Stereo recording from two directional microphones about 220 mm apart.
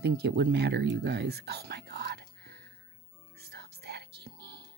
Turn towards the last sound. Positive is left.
turn(degrees=-50)  # may be behind; listen again after turning